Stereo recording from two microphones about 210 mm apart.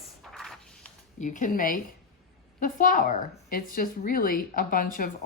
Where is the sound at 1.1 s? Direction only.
40° left (ahead or behind).